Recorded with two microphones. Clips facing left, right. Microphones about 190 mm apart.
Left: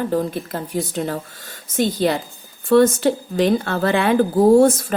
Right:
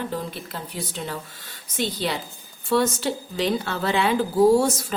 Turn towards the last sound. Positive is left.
turn(degrees=55)  # may be behind; listen again after turning